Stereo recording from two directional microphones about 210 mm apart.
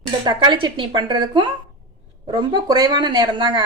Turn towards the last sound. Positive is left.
turn(degrees=-20)  # may be behind; listen again after turning